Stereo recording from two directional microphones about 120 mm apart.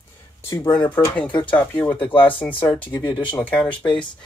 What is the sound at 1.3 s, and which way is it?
Speech, 45° left (ahead or behind).